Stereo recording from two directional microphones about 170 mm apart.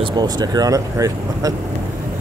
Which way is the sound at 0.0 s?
25° right (ahead or behind).